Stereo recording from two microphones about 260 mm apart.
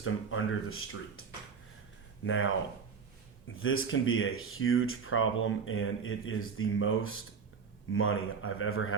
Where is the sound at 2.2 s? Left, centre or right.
Left.